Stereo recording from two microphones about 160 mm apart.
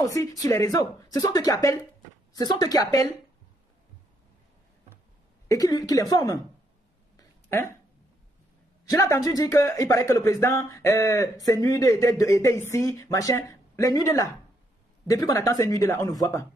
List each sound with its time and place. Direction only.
0.0 s speech: 20° left (ahead or behind)
5.5 s speech: 25° left (ahead or behind)
7.2 s a sound: 15° left (ahead or behind)
8.8 s speech: 20° left (ahead or behind)